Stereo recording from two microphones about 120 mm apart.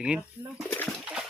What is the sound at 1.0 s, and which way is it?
Horse, 5° right (ahead or behind).